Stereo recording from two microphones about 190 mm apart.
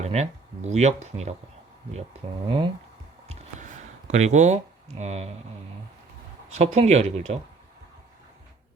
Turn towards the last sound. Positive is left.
turn(degrees=-35)  # may be behind; listen again after turning